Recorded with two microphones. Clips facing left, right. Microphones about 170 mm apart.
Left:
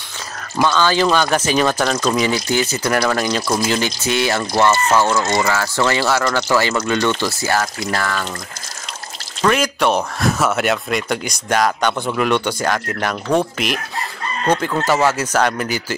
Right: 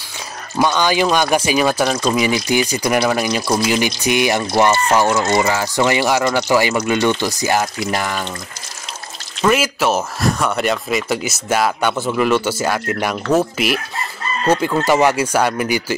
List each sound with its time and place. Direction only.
0.6 s speech: 15° right (ahead or behind)
9.4 s speech: 5° right (ahead or behind)